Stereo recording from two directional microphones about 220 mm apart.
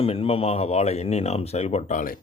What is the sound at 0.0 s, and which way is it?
Speech, 25° left (ahead or behind).